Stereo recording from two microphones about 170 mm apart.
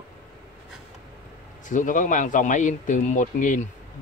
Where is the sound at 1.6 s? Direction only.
50° left (ahead or behind).